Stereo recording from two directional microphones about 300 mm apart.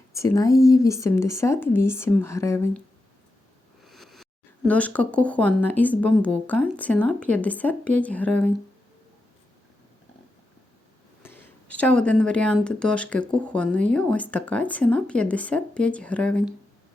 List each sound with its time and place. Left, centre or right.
0.1 s speech: centre
3.8 s speech: centre
11.8 s speech: centre